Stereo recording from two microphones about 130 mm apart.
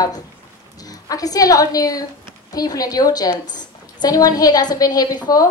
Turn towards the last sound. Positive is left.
turn(degrees=30)  # may be behind; listen again after turning